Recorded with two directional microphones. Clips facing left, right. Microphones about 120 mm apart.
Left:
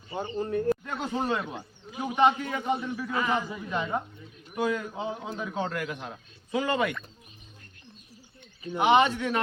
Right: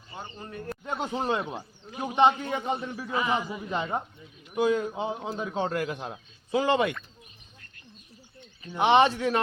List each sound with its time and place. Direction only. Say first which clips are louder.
0.3 s speech: left 16 dB; 25° left (ahead or behind)
0.9 s a man's voice: right 1 dB; 20° right (ahead or behind)
3.2 s speech: right 1 dB; 10° right (ahead or behind)
3.7 s a man's voice: even; 25° right (ahead or behind)
8.8 s speech: right 1 dB; 30° right (ahead or behind)